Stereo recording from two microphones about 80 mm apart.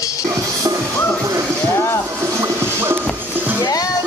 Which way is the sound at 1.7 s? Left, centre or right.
Left.